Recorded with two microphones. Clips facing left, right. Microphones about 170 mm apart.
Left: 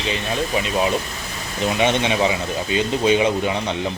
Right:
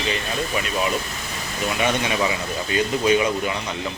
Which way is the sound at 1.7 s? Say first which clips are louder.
Left 3 dB; 25° left (ahead or behind).